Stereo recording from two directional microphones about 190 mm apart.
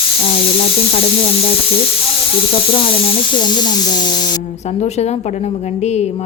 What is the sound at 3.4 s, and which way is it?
Speech, 20° left (ahead or behind).